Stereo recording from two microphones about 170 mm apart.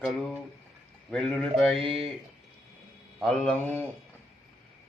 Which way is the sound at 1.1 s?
5° left (ahead or behind).